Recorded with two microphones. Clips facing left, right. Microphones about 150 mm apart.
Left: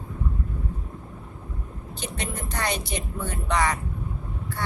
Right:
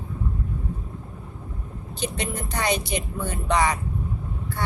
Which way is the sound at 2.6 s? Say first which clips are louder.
Right 4 dB; 15° right (ahead or behind).